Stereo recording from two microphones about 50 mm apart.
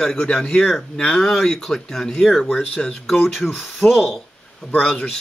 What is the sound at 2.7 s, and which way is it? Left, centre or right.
Speech, centre.